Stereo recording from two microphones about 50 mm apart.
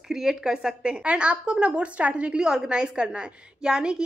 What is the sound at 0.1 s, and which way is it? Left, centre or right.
Speech, centre.